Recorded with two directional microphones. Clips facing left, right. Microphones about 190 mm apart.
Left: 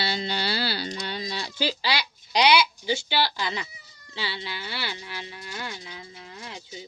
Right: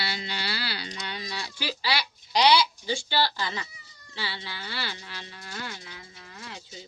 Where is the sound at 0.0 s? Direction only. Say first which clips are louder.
Left 5 dB; 30° left (ahead or behind).